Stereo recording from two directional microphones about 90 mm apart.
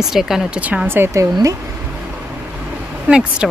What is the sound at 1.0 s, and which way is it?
Speech, 35° right (ahead or behind).